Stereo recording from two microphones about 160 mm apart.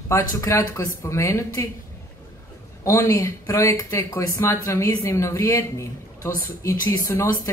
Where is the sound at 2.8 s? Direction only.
20° left (ahead or behind).